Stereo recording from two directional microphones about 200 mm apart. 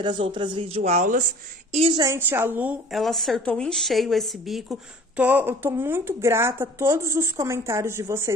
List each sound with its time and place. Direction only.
0.0 s speech: 25° right (ahead or behind)
1.7 s speech: 25° right (ahead or behind)
2.0 s a woman's voice: 10° right (ahead or behind)
2.9 s a woman's voice: centre (ahead or behind)